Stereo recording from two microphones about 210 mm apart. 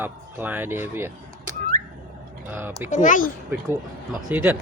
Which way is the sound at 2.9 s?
35° left (ahead or behind).